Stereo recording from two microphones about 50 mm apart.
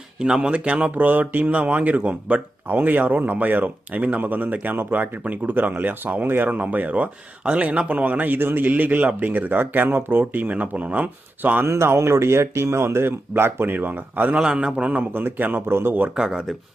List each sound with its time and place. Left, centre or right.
0.2 s speech: centre
2.6 s speech: right
11.6 s speech: right
14.4 s a man's voice: centre
14.8 s speech: right
15.6 s speech: right
16.1 s speech: centre